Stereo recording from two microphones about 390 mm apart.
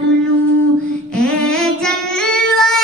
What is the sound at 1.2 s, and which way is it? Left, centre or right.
Child singing, centre.